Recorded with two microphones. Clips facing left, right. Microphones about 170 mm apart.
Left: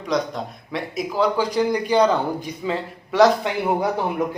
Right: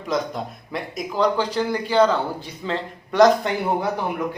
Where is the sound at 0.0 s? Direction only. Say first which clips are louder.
Left 1 dB; centre (ahead or behind).